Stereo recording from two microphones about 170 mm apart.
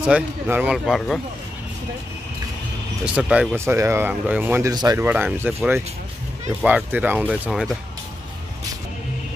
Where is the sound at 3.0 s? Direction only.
5° right (ahead or behind); by 5.1 s 25° right (ahead or behind).